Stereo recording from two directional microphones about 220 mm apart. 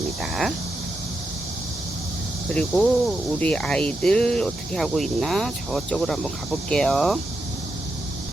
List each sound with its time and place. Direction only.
0.2 s speech: centre (ahead or behind)
2.5 s speech: 5° left (ahead or behind)